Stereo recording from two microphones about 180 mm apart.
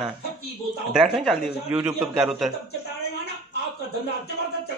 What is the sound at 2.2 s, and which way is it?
Speech, centre (ahead or behind).